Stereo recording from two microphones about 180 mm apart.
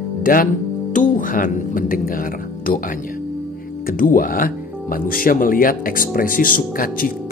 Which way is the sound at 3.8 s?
50° left (ahead or behind).